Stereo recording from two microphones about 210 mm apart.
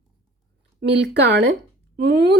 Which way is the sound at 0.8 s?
55° right (ahead or behind).